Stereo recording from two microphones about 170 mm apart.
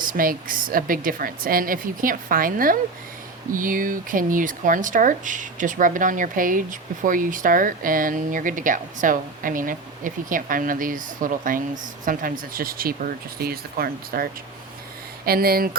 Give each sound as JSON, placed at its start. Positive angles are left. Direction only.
{"t": 0.0, "sound": "a woman's voice", "side_deg": -55}